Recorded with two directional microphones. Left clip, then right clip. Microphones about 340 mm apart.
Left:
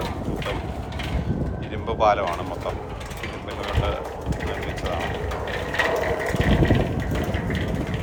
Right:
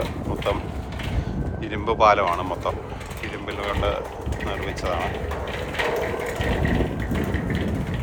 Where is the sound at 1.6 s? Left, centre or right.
Right.